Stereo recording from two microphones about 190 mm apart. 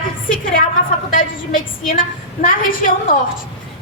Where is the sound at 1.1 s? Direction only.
45° left (ahead or behind).